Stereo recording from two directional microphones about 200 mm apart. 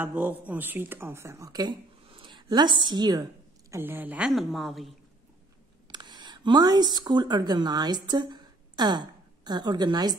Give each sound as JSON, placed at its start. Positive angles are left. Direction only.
{"t": 0.0, "sound": "speech", "side_deg": -10}
{"t": 3.7, "sound": "a woman's voice", "side_deg": -10}
{"t": 5.9, "sound": "speech", "side_deg": -20}